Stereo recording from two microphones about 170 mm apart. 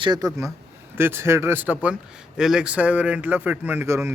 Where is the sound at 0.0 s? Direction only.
25° right (ahead or behind).